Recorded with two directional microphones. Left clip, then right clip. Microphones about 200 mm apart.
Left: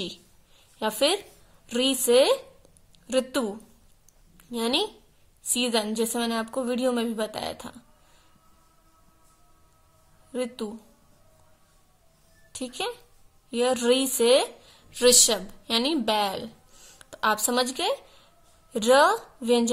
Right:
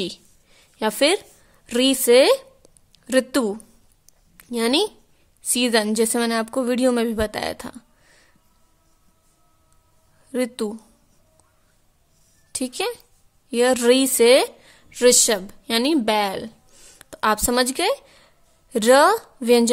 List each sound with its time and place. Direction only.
0.0 s a sound: 40° right (ahead or behind)
1.7 s a woman's voice: 40° right (ahead or behind)
10.3 s a woman's voice: 45° right (ahead or behind)
12.5 s a woman's voice: 45° right (ahead or behind)